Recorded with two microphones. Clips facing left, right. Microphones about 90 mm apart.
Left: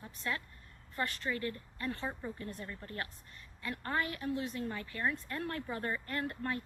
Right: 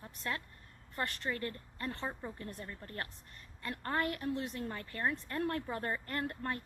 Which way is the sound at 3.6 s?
40° right (ahead or behind).